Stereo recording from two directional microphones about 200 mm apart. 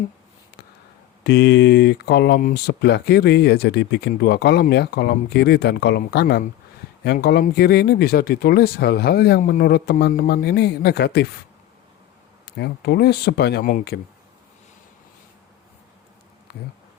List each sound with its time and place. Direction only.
1.2 s speech: 55° left (ahead or behind)
12.5 s speech: 55° left (ahead or behind)